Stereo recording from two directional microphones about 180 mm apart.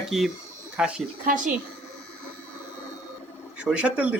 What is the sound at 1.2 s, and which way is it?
Speech, 50° right (ahead or behind).